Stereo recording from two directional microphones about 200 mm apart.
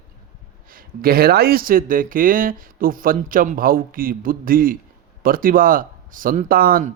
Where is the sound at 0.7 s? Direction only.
45° right (ahead or behind).